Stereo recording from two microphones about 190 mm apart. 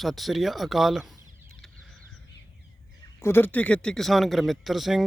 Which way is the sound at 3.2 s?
10° left (ahead or behind).